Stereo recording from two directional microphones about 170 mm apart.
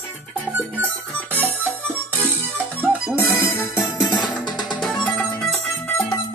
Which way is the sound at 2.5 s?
10° right (ahead or behind).